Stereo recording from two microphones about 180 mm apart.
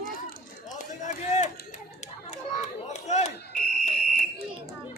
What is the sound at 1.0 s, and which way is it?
Run, 40° left (ahead or behind).